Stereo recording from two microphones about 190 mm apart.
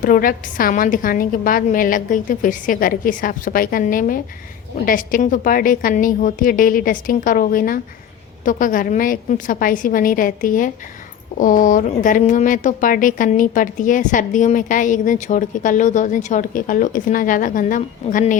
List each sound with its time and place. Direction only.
0.0 s speech: 45° left (ahead or behind)